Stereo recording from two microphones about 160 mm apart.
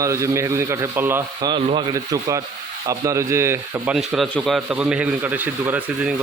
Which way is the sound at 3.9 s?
Centre (ahead or behind).